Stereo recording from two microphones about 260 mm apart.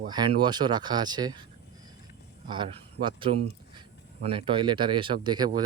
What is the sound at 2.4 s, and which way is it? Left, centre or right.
Speech, centre.